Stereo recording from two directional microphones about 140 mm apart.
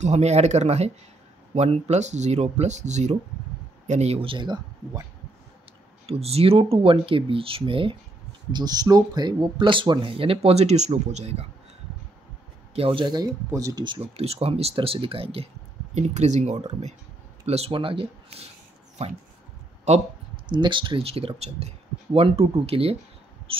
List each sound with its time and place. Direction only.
0.0 s speech: 50° right (ahead or behind); by 5.0 s 30° right (ahead or behind)
6.0 s speech: 45° right (ahead or behind)
12.7 s speech: 40° right (ahead or behind)
14.1 s speech: 45° right (ahead or behind)
19.9 s speech: 50° right (ahead or behind)
20.4 s speech: 35° right (ahead or behind)
23.5 s a sound: 40° right (ahead or behind)